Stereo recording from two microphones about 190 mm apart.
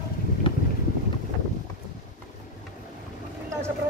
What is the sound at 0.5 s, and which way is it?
Boat, 25° left (ahead or behind).